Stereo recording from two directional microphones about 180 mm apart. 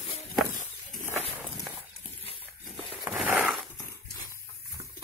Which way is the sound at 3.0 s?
5° right (ahead or behind).